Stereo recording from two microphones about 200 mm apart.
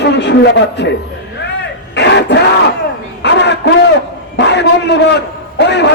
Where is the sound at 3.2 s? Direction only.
60° left (ahead or behind).